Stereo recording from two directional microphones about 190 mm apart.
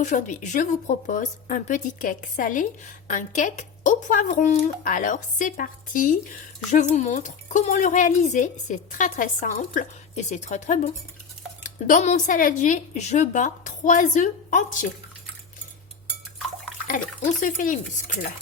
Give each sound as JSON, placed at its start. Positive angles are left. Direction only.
{"t": 0.0, "sound": "a woman's voice", "side_deg": 40}
{"t": 16.8, "sound": "a woman's voice", "side_deg": 45}